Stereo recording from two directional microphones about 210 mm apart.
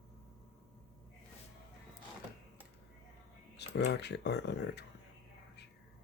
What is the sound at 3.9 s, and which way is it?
Speech, 55° left (ahead or behind).